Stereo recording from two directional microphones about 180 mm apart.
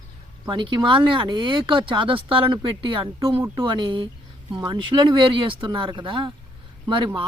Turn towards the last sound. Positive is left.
turn(degrees=-25)  # may be behind; listen again after turning